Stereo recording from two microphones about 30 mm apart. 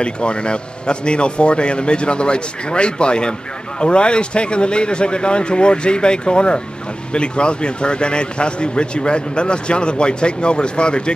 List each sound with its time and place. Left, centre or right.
0.0 s a man's voice: left